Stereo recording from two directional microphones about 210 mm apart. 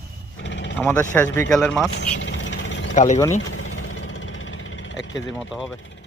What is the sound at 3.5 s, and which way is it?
Engine, 70° left (ahead or behind).